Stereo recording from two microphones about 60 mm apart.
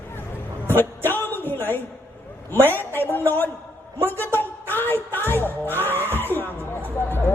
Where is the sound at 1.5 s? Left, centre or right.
Left.